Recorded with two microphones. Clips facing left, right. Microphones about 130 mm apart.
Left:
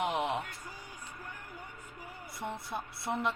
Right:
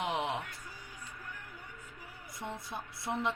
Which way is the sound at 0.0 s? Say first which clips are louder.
Left 2 dB; 55° left (ahead or behind).